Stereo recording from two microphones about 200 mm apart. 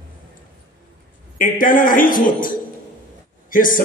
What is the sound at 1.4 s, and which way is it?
Speech, 40° left (ahead or behind).